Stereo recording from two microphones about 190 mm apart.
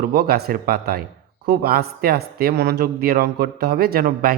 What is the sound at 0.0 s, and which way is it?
Speech, 55° right (ahead or behind).